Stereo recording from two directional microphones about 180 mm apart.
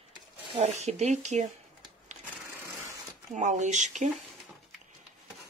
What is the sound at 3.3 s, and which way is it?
Speech, 45° right (ahead or behind).